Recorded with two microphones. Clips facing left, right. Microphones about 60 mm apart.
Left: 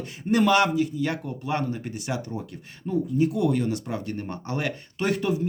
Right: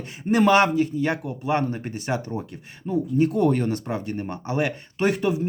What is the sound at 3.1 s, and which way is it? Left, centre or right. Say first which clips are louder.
Speech: right 3 dB; right.